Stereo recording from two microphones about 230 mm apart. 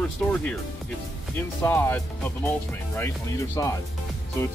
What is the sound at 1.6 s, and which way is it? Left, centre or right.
Speech, centre.